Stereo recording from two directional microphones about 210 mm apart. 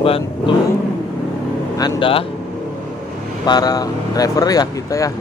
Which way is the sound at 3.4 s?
20° left (ahead or behind).